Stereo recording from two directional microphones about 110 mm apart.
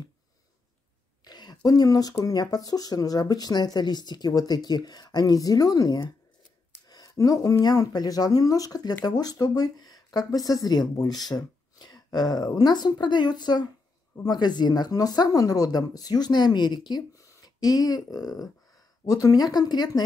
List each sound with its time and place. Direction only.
1.2 s speech: 40° left (ahead or behind)